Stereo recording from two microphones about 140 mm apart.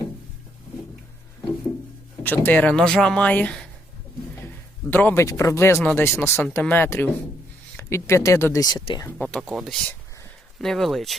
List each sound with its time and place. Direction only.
2.2 s a man's voice: 15° left (ahead or behind); by 9.0 s 30° left (ahead or behind)
9.0 s a man's voice: 10° left (ahead or behind)
9.4 s speech: centre (ahead or behind)